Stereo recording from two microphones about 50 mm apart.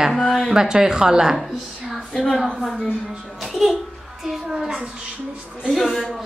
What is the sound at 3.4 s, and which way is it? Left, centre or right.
A child's voice, centre.